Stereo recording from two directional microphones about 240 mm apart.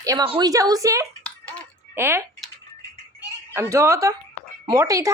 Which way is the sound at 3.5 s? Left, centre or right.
Centre.